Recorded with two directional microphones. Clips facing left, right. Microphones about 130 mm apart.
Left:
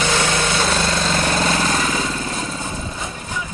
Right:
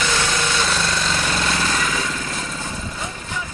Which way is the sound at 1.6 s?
35° left (ahead or behind).